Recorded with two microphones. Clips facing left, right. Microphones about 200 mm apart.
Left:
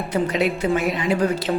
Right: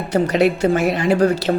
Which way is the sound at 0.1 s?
75° right (ahead or behind).